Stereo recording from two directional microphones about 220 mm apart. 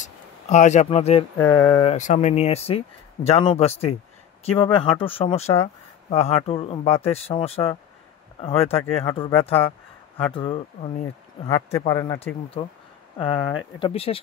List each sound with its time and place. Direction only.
0.0 s a sound: 30° left (ahead or behind)
1.4 s speech: 10° left (ahead or behind)
1.9 s speech: 30° left (ahead or behind)
11.8 s speech: 15° left (ahead or behind)
13.7 s speech: 25° left (ahead or behind)